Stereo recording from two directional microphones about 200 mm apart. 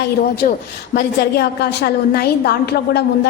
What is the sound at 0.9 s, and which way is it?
A woman's voice, 55° left (ahead or behind).